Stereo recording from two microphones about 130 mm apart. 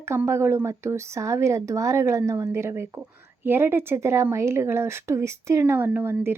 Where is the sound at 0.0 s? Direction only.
20° right (ahead or behind).